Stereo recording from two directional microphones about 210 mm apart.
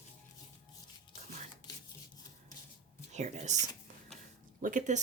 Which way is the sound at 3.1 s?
35° right (ahead or behind).